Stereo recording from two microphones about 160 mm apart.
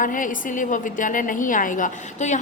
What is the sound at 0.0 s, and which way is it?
A woman's voice, 55° left (ahead or behind).